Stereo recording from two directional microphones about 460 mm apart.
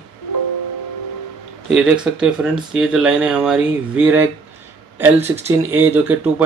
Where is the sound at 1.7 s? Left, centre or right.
Centre.